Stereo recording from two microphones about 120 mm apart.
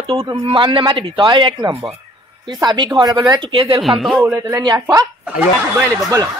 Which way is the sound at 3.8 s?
Centre (ahead or behind).